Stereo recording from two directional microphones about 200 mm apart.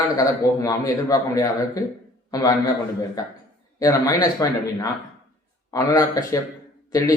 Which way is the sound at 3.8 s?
15° left (ahead or behind).